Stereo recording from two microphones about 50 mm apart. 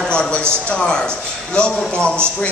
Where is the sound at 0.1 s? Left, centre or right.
Centre.